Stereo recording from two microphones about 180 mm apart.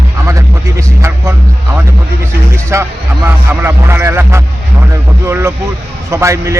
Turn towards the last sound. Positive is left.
turn(degrees=-15)  # may be behind; listen again after turning